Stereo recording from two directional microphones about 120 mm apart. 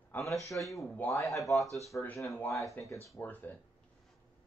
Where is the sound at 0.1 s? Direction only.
25° left (ahead or behind).